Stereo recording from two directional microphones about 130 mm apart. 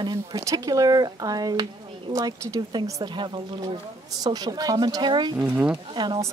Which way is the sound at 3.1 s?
35° right (ahead or behind).